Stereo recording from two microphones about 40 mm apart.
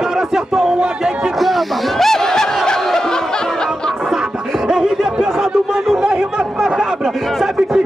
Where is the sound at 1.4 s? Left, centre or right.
Centre.